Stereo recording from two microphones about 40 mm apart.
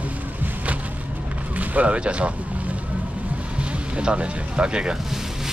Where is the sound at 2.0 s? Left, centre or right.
Right.